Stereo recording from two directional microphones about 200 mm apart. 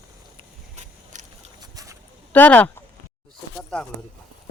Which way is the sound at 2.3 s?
10° left (ahead or behind).